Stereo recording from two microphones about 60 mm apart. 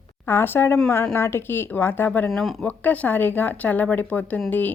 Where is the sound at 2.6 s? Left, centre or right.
Left.